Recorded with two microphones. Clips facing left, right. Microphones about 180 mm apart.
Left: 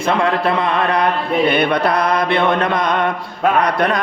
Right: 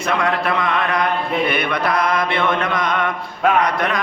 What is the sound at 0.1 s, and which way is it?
Mantra, 30° left (ahead or behind).